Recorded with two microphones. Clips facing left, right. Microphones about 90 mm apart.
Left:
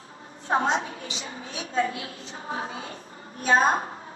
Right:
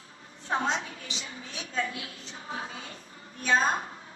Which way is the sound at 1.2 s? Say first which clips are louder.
Left 5 dB; 30° left (ahead or behind).